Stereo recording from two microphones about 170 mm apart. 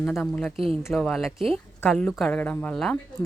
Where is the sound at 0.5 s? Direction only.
35° right (ahead or behind).